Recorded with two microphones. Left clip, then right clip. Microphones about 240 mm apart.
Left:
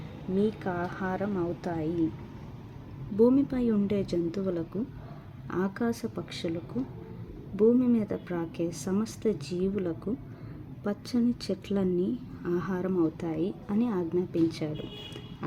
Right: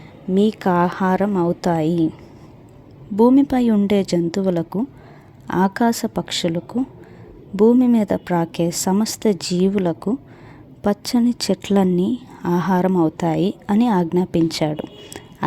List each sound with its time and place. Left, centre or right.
0.3 s a woman's voice: right
3.2 s a woman's voice: right
7.5 s a woman's voice: right